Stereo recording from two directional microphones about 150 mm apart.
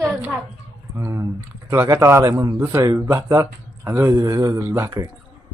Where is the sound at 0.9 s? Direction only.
20° right (ahead or behind).